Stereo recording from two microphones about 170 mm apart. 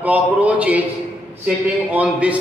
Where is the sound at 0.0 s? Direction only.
10° right (ahead or behind).